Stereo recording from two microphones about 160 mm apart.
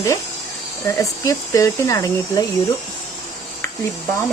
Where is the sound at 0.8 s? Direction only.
20° left (ahead or behind).